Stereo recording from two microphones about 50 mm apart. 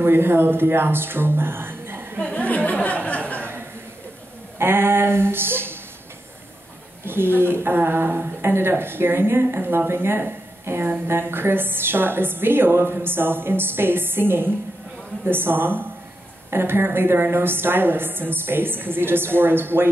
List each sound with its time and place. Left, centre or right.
0.0 s a woman's voice: right
2.3 s speech: left
3.3 s a sound: right
4.6 s a woman's voice: right
7.1 s a woman's voice: right